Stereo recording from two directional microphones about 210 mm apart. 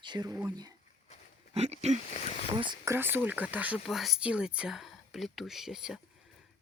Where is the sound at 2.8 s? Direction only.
10° right (ahead or behind).